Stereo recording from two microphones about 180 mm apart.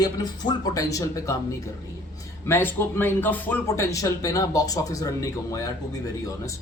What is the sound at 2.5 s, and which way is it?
Speech, 10° left (ahead or behind).